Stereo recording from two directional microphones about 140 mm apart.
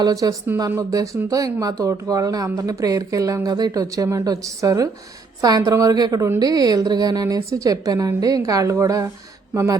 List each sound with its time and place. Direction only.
0.0 s a woman's voice: 25° right (ahead or behind)